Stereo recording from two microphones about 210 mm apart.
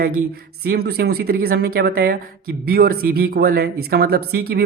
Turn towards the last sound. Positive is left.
turn(degrees=-50)  # may be behind; listen again after turning